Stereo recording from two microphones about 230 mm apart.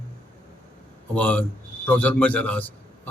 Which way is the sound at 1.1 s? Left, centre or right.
Centre.